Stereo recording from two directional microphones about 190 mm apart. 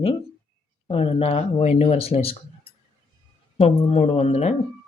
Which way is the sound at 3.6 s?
30° left (ahead or behind).